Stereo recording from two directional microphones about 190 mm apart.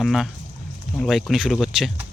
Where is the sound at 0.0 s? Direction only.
Centre (ahead or behind).